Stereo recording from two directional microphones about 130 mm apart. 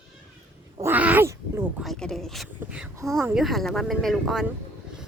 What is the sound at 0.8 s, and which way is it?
Speech, 10° right (ahead or behind).